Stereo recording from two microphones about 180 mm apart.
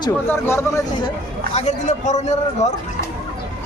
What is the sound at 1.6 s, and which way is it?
A man's voice, 40° left (ahead or behind).